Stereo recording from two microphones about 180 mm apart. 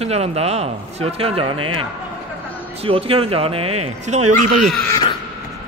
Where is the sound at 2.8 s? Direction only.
30° right (ahead or behind).